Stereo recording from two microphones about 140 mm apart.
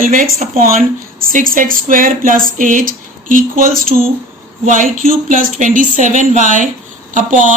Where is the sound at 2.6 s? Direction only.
70° right (ahead or behind); by 4.0 s 90° right.